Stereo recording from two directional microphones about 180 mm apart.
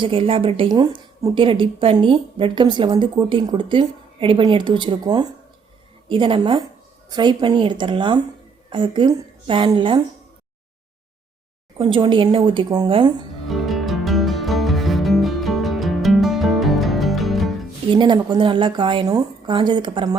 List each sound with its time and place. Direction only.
0.0 s a woman's voice: 30° right (ahead or behind)
11.8 s a woman's voice: 30° right (ahead or behind)
13.5 s music: centre (ahead or behind)
17.9 s a woman's voice: 25° right (ahead or behind)